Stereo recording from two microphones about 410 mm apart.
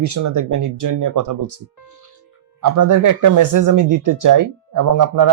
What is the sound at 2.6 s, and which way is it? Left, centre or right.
Speech, right.